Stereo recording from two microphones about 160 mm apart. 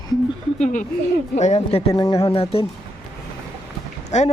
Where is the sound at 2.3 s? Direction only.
35° left (ahead or behind).